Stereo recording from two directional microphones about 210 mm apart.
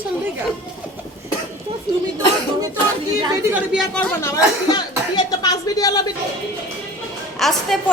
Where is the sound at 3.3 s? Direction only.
10° right (ahead or behind).